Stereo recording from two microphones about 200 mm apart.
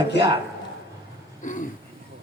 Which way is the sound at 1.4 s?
40° left (ahead or behind).